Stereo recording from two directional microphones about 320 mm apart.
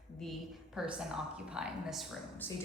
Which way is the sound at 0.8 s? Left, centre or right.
Centre.